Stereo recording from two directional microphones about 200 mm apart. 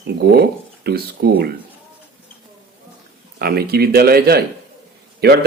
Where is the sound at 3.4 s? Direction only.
50° right (ahead or behind).